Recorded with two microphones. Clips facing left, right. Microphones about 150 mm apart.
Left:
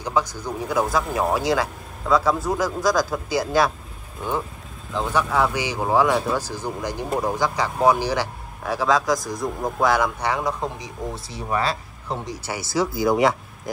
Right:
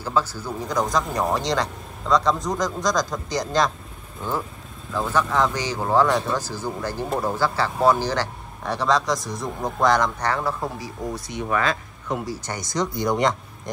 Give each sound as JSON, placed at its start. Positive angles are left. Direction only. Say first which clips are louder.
{"t": 0.0, "sound": "speech", "louder": "even", "side_deg": 15}
{"t": 4.9, "sound": "speech", "louder": "even", "side_deg": 15}
{"t": 11.2, "sound": "speech", "louder": "right 1 dB", "side_deg": 30}
{"t": 12.7, "sound": "speech", "louder": "left 3 dB", "side_deg": 5}